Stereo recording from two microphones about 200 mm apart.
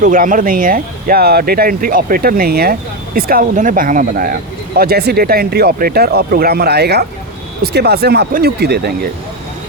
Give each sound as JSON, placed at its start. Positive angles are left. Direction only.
{"t": 0.0, "sound": "speech", "side_deg": -40}